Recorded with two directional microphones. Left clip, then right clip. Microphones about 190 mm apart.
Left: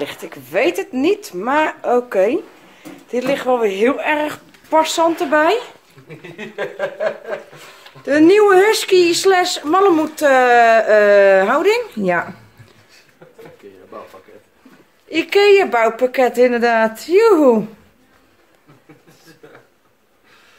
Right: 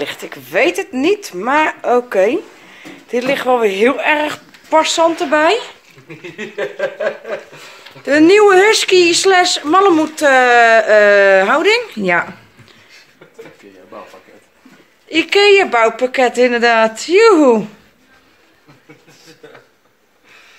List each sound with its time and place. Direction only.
0.0 s speech: 5° right (ahead or behind)
6.3 s a sound: 35° right (ahead or behind)
8.0 s speech: 15° right (ahead or behind); by 12.3 s 5° left (ahead or behind)
15.0 s speech: centre (ahead or behind)